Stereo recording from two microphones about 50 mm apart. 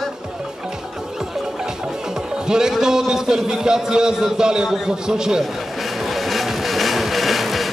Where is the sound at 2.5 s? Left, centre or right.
Centre.